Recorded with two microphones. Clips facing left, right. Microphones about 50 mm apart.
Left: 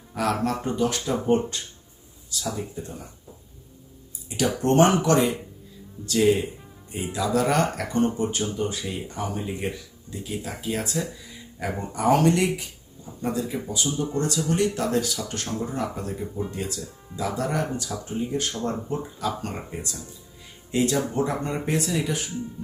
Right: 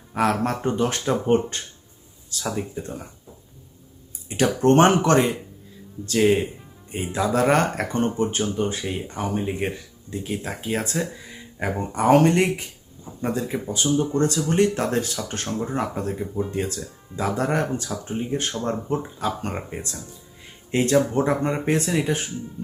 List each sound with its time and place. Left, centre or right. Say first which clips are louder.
0.1 s speech: right 3 dB; right
4.3 s speech: right 4 dB; right